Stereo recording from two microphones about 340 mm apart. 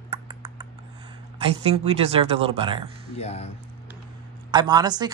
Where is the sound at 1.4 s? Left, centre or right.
Centre.